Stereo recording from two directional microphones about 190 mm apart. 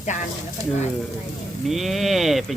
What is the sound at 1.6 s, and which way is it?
Speech, centre (ahead or behind).